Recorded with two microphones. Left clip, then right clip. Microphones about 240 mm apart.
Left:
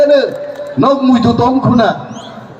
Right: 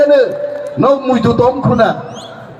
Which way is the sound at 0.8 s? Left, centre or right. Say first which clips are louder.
Left 1 dB; left.